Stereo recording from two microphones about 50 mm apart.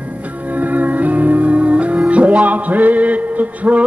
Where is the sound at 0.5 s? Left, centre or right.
Right.